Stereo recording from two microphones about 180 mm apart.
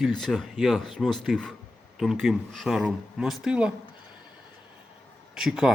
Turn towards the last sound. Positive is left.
turn(degrees=0)  # may be behind; listen again after turning